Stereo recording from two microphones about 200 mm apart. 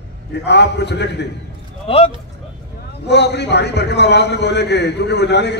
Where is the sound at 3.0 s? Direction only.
60° left (ahead or behind).